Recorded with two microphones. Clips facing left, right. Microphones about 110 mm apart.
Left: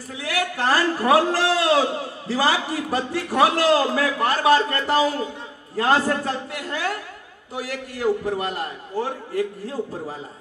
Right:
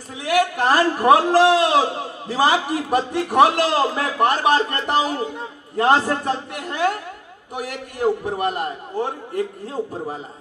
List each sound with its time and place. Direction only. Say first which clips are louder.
0.2 s a man's voice: right 6 dB; 20° right (ahead or behind)